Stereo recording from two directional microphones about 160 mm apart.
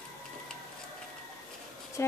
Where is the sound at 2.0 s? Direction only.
15° left (ahead or behind).